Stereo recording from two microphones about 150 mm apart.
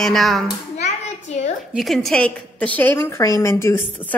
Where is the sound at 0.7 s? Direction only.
50° left (ahead or behind).